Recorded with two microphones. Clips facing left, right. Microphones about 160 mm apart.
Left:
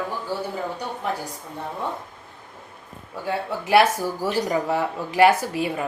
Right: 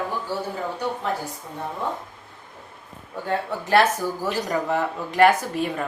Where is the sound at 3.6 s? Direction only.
10° left (ahead or behind).